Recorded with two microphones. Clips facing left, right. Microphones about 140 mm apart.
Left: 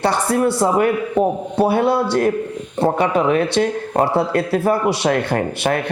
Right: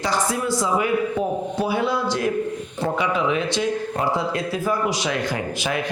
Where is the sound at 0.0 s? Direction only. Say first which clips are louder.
Left 6 dB; 60° left (ahead or behind).